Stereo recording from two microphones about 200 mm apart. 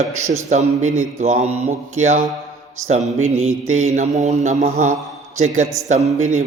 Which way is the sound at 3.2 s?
90° right.